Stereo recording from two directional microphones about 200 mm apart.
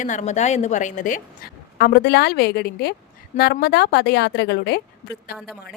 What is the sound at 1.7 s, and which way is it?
A woman's voice, 55° left (ahead or behind).